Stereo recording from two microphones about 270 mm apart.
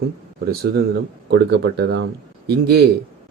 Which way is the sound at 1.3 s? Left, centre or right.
Right.